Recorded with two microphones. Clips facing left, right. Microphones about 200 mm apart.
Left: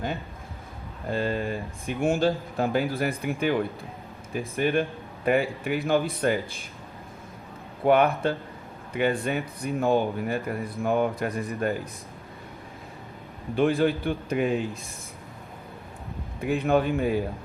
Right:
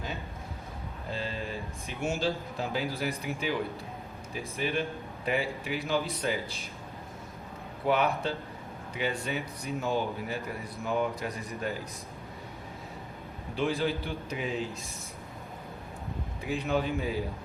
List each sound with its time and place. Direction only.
1.1 s a man's voice: 55° left (ahead or behind)
7.9 s a man's voice: 55° left (ahead or behind)
13.6 s speech: 55° left (ahead or behind)
16.4 s speech: 55° left (ahead or behind)